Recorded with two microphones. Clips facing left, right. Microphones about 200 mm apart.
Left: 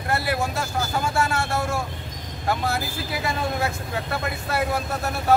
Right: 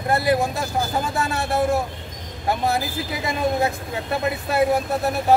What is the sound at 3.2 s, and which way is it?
Speech, 20° right (ahead or behind).